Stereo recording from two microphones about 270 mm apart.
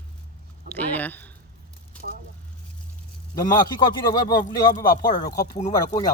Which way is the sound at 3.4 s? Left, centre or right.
Centre.